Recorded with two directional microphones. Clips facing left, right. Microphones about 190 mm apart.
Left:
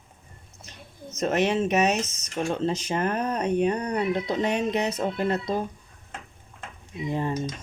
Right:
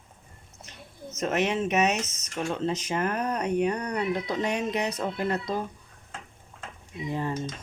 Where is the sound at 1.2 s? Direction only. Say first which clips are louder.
Left 3 dB; 35° left (ahead or behind).